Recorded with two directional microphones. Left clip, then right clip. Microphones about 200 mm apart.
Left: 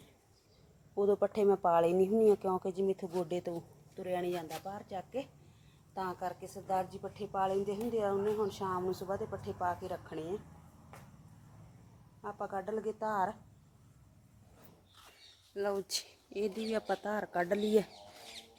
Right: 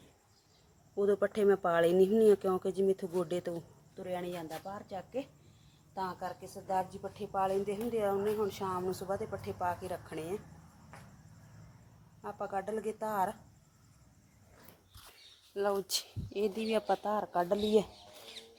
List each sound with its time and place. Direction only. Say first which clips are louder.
1.3 s a woman's voice: right 1 dB; 5° right (ahead or behind)
1.6 s speech: right 1 dB; 15° right (ahead or behind)
3.2 s speech: right 1 dB; 10° right (ahead or behind)
3.9 s a woman's voice: left 3 dB; 20° left (ahead or behind); by 10.3 s centre (ahead or behind)
12.2 s a woman's voice: right 2 dB; 5° left (ahead or behind)
15.5 s speech: right 3 dB; 10° right (ahead or behind)
16.9 s a woman's voice: right 3 dB; centre (ahead or behind)